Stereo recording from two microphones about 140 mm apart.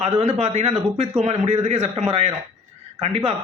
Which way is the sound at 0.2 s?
50° right (ahead or behind).